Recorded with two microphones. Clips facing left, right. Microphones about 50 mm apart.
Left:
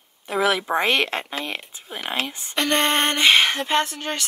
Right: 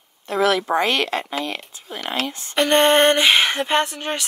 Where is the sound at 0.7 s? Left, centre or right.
Left.